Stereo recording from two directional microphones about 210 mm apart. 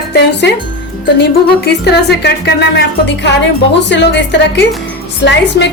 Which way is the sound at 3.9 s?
55° left (ahead or behind).